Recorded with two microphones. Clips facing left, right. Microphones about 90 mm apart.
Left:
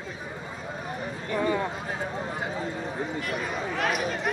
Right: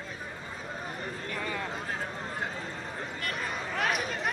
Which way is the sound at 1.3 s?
20° left (ahead or behind).